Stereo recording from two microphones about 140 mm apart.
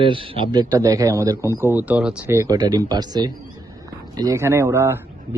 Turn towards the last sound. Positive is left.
turn(degrees=-15)  # may be behind; listen again after turning